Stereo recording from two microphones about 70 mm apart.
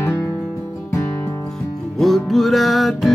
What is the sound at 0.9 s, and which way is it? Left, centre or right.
Music, left.